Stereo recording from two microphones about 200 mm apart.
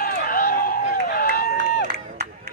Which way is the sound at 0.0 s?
45° left (ahead or behind).